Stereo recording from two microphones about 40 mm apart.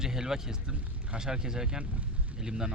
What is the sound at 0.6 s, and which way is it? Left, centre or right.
Vehicle, right.